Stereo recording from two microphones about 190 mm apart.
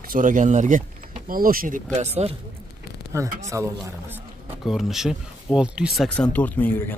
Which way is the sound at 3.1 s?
15° right (ahead or behind).